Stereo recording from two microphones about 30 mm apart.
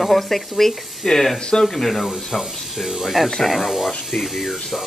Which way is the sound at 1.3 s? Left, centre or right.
Left.